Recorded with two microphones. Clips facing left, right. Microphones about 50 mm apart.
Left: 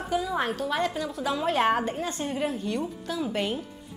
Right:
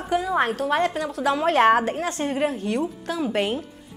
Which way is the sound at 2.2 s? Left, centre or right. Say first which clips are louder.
Right 7 dB; right.